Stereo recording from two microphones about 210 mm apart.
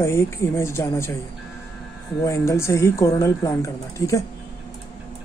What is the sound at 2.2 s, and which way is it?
Speech, 15° left (ahead or behind).